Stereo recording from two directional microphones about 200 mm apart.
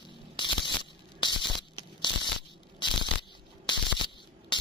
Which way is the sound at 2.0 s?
25° left (ahead or behind).